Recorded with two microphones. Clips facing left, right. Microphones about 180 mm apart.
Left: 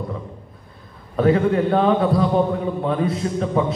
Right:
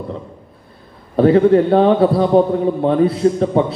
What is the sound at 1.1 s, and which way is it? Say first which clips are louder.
A man's voice: right 6 dB; 35° right (ahead or behind).